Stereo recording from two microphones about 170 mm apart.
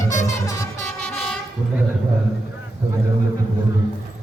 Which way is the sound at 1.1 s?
5° left (ahead or behind).